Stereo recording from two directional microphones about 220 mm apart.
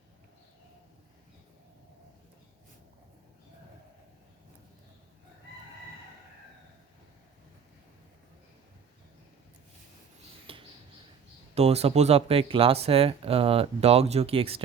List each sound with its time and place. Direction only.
10.5 s mouse: 25° right (ahead or behind)
11.5 s speech: 30° right (ahead or behind)